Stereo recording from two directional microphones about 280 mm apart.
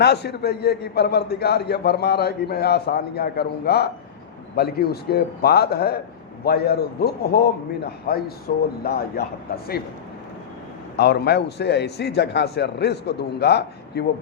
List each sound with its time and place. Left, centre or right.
0.0 s a man's voice: left
10.9 s a man's voice: left